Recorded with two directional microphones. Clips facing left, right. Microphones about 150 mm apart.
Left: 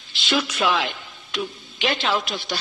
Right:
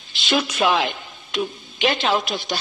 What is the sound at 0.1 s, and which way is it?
A woman's voice, 20° right (ahead or behind).